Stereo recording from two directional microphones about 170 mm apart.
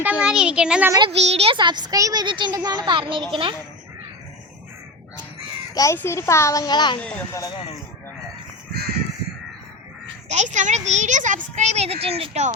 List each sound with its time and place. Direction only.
0.0 s a child's voice: 5° right (ahead or behind)
0.9 s a child's voice: 25° right (ahead or behind)
1.3 s a child's voice: 35° right (ahead or behind)
5.7 s speech: 20° left (ahead or behind)
10.2 s speech: 45° right (ahead or behind)